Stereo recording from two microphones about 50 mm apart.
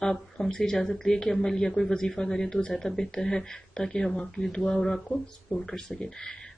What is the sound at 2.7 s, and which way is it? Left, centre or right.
Speech, centre.